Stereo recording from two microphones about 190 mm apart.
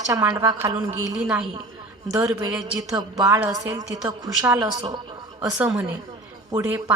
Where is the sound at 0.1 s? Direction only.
15° right (ahead or behind).